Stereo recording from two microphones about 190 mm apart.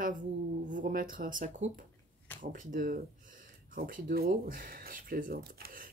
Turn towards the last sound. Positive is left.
turn(degrees=-50)  # may be behind; listen again after turning